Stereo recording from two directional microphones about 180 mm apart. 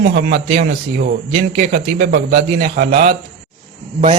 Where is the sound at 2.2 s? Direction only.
55° right (ahead or behind).